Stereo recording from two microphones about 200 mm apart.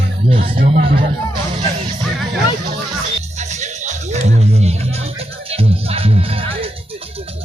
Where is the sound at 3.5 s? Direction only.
35° right (ahead or behind).